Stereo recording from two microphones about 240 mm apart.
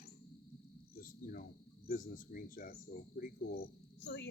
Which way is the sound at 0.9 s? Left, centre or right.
Left.